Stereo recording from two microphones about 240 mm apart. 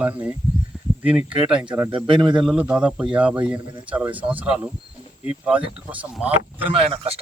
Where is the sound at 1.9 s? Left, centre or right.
Right.